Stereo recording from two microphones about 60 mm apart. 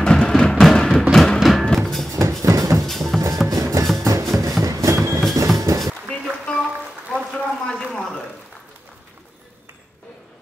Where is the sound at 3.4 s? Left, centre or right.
Right.